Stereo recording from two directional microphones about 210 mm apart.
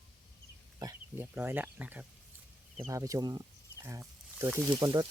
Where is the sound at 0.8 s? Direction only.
15° right (ahead or behind).